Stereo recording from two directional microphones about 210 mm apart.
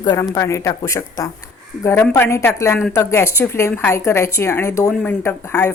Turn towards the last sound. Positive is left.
turn(degrees=10)  # may be behind; listen again after turning